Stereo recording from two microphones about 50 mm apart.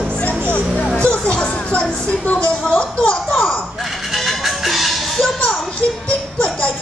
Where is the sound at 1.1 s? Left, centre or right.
Left.